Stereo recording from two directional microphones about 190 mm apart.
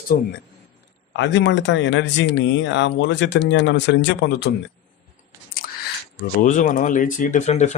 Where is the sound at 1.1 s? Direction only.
70° left (ahead or behind).